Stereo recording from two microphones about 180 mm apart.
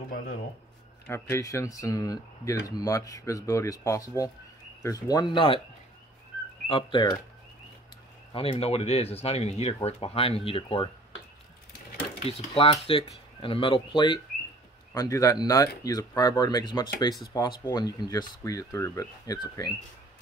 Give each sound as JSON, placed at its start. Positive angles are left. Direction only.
{"t": 1.0, "sound": "speech", "side_deg": 15}
{"t": 6.7, "sound": "speech", "side_deg": 25}
{"t": 8.3, "sound": "speech", "side_deg": 30}
{"t": 12.3, "sound": "speech", "side_deg": 35}